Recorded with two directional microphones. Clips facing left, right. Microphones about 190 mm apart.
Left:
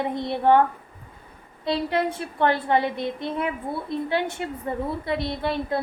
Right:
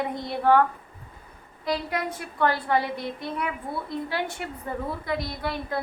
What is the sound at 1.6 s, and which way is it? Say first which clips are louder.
A woman's voice: left 4 dB; 30° left (ahead or behind).